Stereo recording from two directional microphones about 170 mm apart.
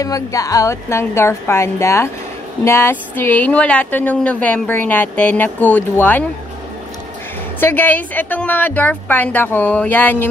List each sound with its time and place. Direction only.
0.0 s speech: 20° left (ahead or behind)
7.6 s speech: 10° left (ahead or behind)